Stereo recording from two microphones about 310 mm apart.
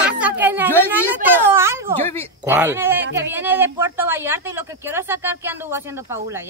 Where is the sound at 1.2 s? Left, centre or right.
Centre.